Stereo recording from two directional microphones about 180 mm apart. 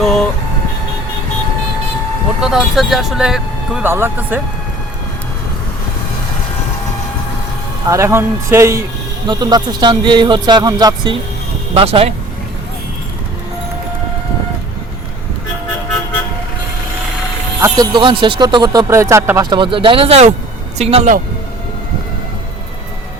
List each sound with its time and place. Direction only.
0.0 s vehicle: centre (ahead or behind)
2.4 s speech: centre (ahead or behind)
7.9 s speech: 15° right (ahead or behind); by 12.1 s 35° right (ahead or behind)
17.6 s speech: 25° right (ahead or behind)